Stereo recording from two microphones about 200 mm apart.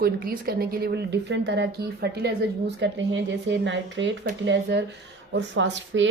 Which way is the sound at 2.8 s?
65° right (ahead or behind).